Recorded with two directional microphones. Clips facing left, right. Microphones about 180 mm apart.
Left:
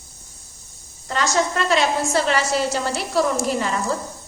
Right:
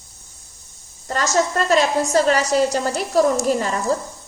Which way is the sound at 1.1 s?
45° right (ahead or behind).